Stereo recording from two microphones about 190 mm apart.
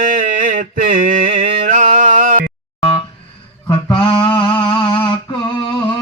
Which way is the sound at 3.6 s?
25° left (ahead or behind).